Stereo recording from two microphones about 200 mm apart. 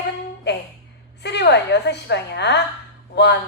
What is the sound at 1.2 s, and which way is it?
A woman's voice, 60° left (ahead or behind).